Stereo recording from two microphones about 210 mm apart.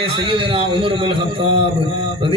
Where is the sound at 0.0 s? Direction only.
25° right (ahead or behind).